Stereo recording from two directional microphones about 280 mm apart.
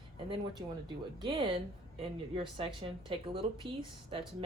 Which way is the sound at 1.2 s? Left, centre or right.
Centre.